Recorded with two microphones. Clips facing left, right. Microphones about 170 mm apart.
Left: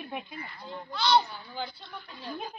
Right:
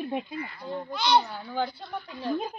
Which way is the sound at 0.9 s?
15° right (ahead or behind).